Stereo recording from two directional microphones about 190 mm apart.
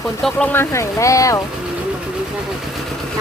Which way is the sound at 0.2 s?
5° left (ahead or behind).